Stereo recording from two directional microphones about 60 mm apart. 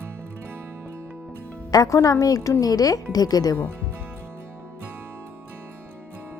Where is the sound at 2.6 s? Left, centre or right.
Left.